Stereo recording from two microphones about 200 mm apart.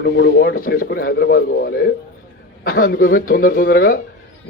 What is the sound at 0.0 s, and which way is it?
A man's voice, 55° left (ahead or behind).